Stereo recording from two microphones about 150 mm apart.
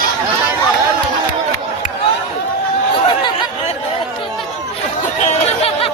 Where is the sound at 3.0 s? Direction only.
35° left (ahead or behind).